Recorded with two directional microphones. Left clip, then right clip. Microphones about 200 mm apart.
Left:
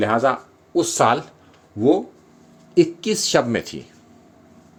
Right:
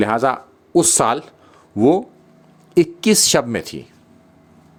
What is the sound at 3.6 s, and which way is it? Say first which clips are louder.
Speech: right 2 dB; 20° right (ahead or behind).